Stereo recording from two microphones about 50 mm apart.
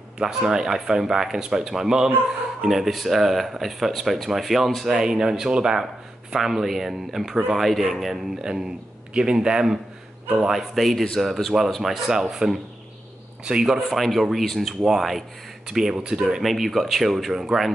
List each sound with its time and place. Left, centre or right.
0.2 s speech: centre
13.7 s speech: centre
16.4 s speech: centre